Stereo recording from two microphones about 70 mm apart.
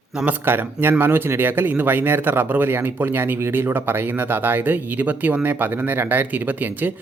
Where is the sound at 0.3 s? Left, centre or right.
Right.